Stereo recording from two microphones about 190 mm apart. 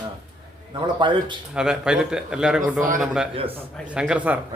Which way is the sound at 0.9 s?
25° right (ahead or behind).